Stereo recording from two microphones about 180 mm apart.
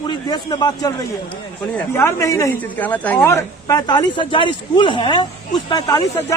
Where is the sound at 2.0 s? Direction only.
15° left (ahead or behind).